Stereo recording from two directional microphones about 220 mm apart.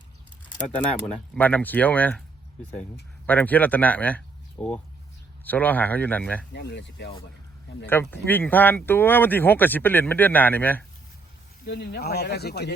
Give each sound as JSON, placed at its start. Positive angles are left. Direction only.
{"t": 0.8, "sound": "speech", "side_deg": 5}
{"t": 3.2, "sound": "speech", "side_deg": 10}
{"t": 6.5, "sound": "speech", "side_deg": 50}
{"t": 7.9, "sound": "speech", "side_deg": 10}
{"t": 11.6, "sound": "speech", "side_deg": 50}